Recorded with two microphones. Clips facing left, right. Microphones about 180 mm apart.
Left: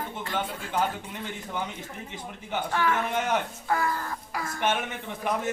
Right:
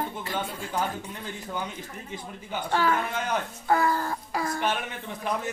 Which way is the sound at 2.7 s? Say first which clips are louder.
Right 2 dB; 30° right (ahead or behind).